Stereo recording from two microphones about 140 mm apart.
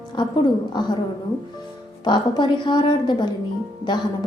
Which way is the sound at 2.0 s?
35° left (ahead or behind).